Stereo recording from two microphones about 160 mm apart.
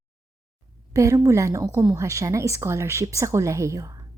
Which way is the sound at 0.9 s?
20° right (ahead or behind).